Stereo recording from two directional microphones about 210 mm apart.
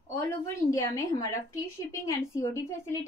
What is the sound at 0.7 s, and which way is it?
Speech, 15° left (ahead or behind).